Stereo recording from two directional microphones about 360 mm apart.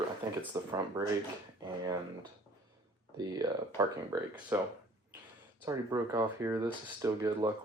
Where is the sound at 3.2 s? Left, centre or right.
Centre.